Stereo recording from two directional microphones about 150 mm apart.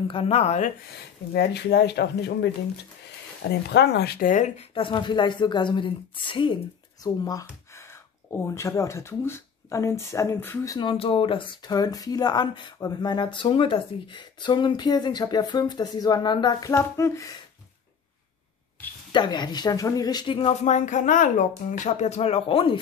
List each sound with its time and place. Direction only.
0.1 s speech: 40° left (ahead or behind)
1.3 s speech: 90° left
3.4 s speech: 90° left; by 4.6 s 55° left (ahead or behind)
4.7 s a woman's voice: 35° left (ahead or behind); by 10.8 s 15° left (ahead or behind)
10.8 s speech: 35° left (ahead or behind); by 17.3 s 20° left (ahead or behind)
19.1 s speech: 30° left (ahead or behind)
20.6 s speech: 55° left (ahead or behind); by 22.8 s 40° left (ahead or behind)